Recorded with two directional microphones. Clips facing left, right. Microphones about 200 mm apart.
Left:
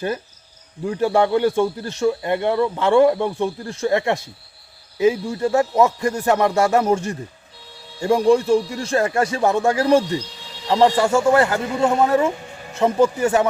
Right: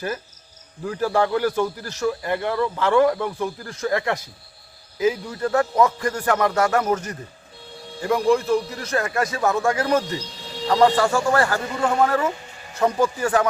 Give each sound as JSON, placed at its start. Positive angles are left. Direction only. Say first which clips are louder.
{"t": 0.9, "sound": "a man's voice", "louder": "left 3 dB", "side_deg": 25}